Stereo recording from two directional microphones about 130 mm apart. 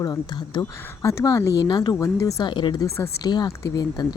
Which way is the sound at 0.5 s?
25° left (ahead or behind).